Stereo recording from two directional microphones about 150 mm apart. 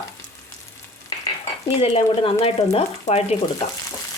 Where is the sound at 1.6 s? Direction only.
40° left (ahead or behind).